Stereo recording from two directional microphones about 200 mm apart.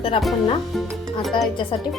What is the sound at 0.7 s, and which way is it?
Speech, centre (ahead or behind).